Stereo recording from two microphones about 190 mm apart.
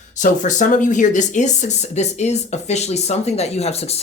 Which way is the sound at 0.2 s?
40° left (ahead or behind).